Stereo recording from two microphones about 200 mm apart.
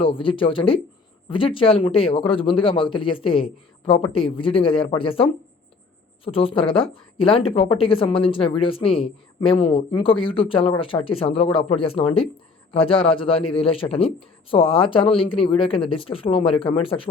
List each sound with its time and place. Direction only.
0.0 s a woman's voice: 25° left (ahead or behind)